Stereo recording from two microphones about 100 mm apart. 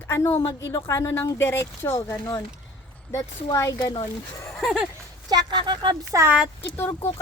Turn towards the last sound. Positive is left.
turn(degrees=25)  # may be behind; listen again after turning